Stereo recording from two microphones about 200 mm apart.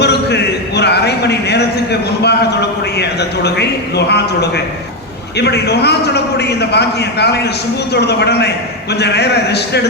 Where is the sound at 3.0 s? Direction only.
55° left (ahead or behind).